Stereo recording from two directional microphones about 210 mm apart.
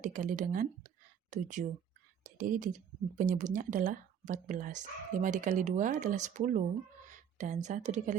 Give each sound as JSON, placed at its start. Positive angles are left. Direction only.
{"t": 0.0, "sound": "speech", "side_deg": -40}
{"t": 2.2, "sound": "whispering", "side_deg": -40}
{"t": 3.2, "sound": "speech", "side_deg": -35}